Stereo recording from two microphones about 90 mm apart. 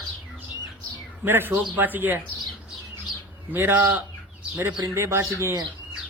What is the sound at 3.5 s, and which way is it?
Speech, 25° right (ahead or behind).